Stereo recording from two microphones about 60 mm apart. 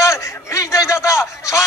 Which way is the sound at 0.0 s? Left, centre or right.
Left.